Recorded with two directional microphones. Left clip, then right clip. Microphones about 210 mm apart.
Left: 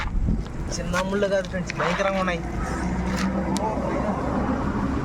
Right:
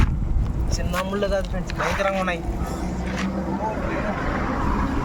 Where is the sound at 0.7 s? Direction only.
5° right (ahead or behind).